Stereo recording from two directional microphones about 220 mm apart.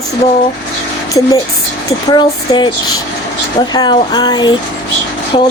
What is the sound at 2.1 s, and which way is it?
A woman's voice, 20° left (ahead or behind).